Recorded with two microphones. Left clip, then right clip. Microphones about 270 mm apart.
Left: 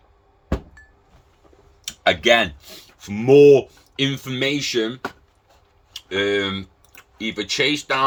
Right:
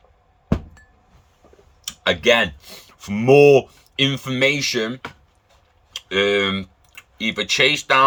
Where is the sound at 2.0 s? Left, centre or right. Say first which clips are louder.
Even; centre.